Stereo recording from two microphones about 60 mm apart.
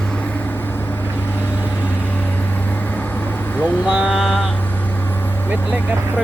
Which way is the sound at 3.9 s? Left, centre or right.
Right.